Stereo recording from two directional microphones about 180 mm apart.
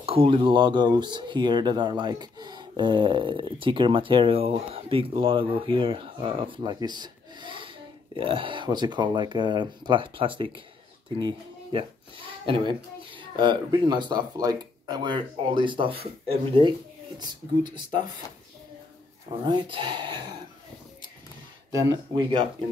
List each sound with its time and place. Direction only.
0.0 s speech: 30° right (ahead or behind)
19.4 s speech: 25° right (ahead or behind)
21.7 s speech: 20° right (ahead or behind)